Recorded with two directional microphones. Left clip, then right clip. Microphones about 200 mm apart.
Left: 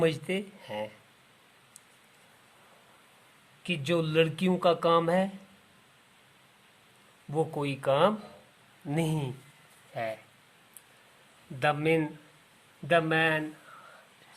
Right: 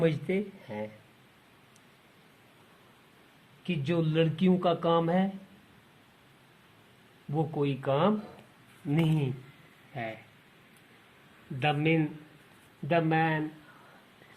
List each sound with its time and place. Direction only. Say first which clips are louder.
0.0 s speech: left 1 dB; 35° left (ahead or behind)
3.6 s speech: left 2 dB; 30° left (ahead or behind)
7.3 s speech: even; 30° left (ahead or behind)
11.6 s speech: left 1 dB; 35° left (ahead or behind)